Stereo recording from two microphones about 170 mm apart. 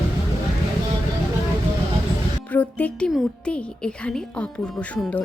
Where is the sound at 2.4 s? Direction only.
10° left (ahead or behind).